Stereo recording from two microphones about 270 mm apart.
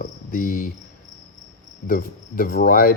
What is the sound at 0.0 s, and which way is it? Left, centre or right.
Cricket, left.